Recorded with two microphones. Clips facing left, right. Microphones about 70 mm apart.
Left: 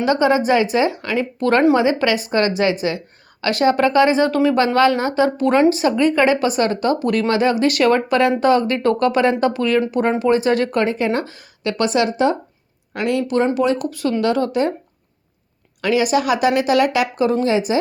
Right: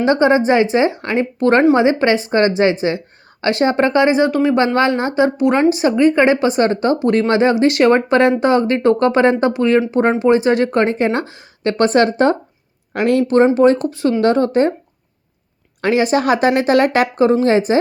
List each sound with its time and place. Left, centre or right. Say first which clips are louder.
0.0 s speech: right 3 dB; right
15.8 s speech: right 2 dB; right